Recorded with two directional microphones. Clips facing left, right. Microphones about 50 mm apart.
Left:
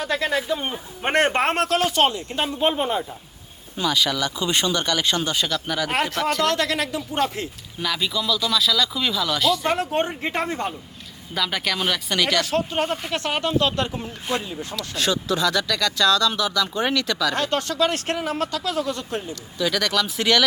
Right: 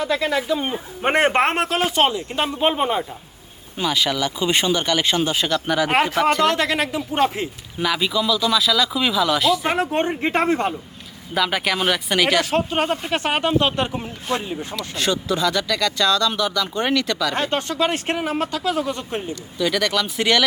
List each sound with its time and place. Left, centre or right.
0.6 s speech: centre
2.6 s speech: right
3.8 s speech: centre
5.9 s speech: centre
10.0 s speech: right
10.4 s speech: right
11.3 s speech: centre
12.5 s speech: right
14.8 s speech: centre
17.3 s speech: right
19.3 s speech: centre